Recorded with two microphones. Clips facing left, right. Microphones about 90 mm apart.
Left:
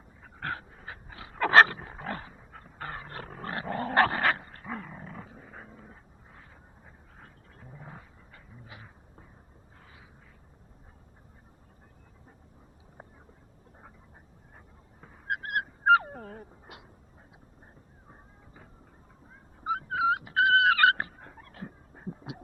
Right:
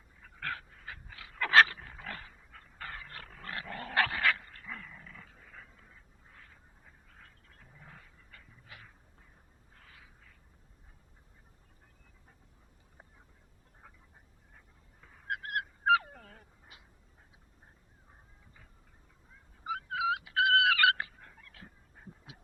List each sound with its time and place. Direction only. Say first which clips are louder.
0.2 s dog: left 4 dB; 30° left (ahead or behind)
15.0 s dog: left 4 dB; 35° left (ahead or behind)
18.1 s a sound: left 8 dB; 40° left (ahead or behind)